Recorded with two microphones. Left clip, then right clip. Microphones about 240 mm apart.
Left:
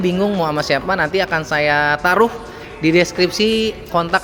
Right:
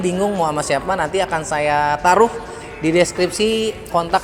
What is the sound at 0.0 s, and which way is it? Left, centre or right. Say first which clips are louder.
Speech: even; left.